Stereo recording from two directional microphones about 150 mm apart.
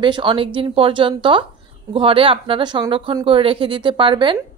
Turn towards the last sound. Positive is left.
turn(degrees=-35)  # may be behind; listen again after turning